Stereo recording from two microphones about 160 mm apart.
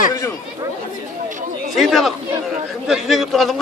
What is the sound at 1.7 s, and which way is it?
A man's voice, centre (ahead or behind).